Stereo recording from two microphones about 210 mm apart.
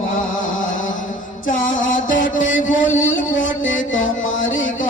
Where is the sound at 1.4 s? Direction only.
40° left (ahead or behind).